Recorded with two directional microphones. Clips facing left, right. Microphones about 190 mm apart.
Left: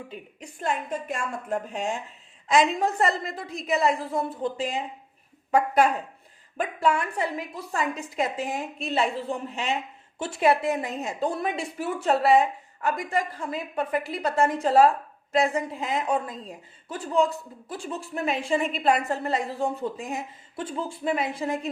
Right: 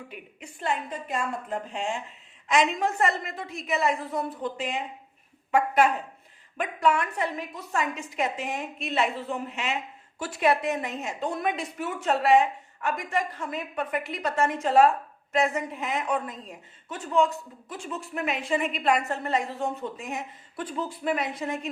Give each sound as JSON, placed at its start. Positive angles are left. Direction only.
{"t": 0.6, "sound": "a woman's voice", "side_deg": 50}